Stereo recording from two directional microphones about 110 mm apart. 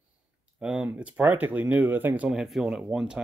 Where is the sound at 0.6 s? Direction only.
10° right (ahead or behind).